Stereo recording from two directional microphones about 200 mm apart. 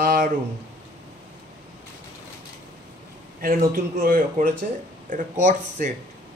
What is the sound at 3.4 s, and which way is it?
A man's voice, 45° right (ahead or behind).